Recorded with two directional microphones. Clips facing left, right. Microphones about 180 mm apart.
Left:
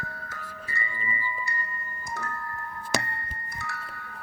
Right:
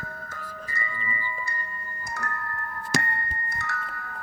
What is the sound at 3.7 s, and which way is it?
Chime, 45° right (ahead or behind).